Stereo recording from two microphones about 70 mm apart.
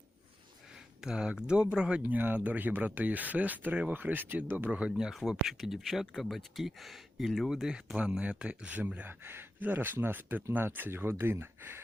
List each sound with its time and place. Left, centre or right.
1.0 s speech: centre; by 4.7 s right
4.9 s speech: centre
9.0 s speech: right